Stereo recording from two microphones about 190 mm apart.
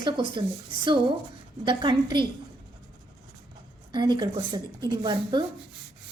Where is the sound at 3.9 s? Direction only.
20° right (ahead or behind).